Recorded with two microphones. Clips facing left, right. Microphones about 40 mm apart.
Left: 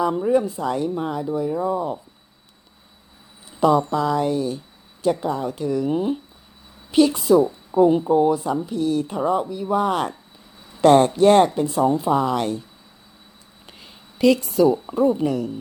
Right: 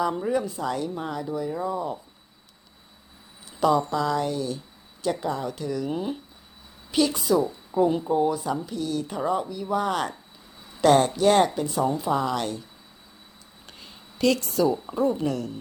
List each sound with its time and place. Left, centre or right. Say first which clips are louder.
0.0 s speech: left 6 dB; centre
3.5 s speech: left 4 dB; centre
5.5 s speech: left 6 dB; centre
13.7 s a woman's voice: left 1 dB; centre